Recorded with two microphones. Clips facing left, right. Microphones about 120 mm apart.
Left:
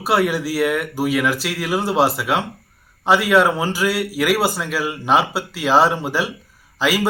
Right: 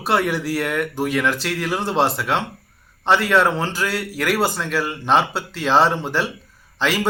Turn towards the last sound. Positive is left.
turn(degrees=10)  # may be behind; listen again after turning